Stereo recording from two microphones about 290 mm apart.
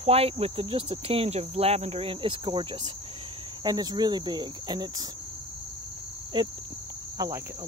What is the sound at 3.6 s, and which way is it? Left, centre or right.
Speech, centre.